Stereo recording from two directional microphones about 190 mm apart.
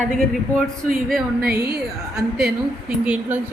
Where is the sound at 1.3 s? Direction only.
55° right (ahead or behind).